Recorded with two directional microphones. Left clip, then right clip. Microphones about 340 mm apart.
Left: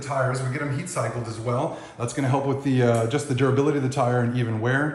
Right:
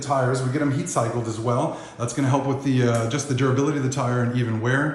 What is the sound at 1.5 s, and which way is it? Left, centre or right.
Speech, centre.